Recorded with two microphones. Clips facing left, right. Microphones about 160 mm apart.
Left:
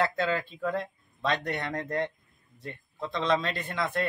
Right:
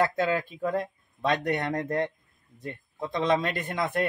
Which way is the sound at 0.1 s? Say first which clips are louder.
Right 2 dB; 15° right (ahead or behind).